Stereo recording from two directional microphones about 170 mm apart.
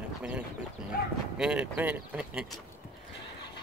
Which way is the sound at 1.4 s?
5° right (ahead or behind).